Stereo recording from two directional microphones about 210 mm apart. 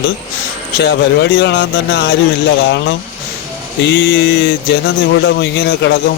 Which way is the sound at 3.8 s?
55° left (ahead or behind).